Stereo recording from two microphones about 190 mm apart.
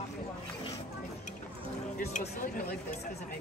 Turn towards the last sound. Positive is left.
turn(degrees=45)  # may be behind; listen again after turning